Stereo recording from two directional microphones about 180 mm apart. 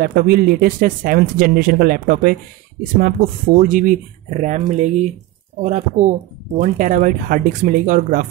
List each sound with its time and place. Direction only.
0.0 s speech: 55° right (ahead or behind)